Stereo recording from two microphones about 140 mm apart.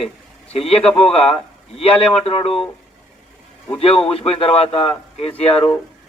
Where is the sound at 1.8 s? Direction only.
45° left (ahead or behind).